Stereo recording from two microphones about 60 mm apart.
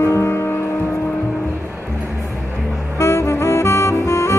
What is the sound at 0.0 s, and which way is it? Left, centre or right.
Music, left.